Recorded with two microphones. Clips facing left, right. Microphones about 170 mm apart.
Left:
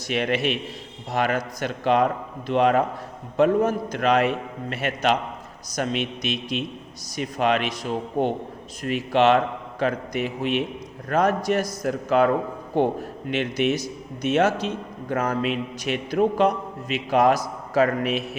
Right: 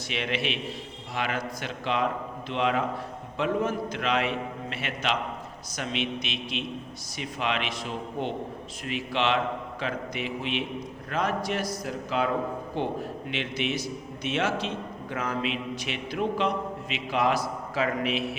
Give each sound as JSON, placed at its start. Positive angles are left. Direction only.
{"t": 0.1, "sound": "a man's voice", "side_deg": 45}